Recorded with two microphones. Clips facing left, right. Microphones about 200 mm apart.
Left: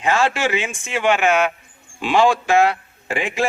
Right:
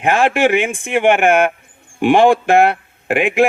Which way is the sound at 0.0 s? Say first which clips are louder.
Right 5 dB; 55° right (ahead or behind).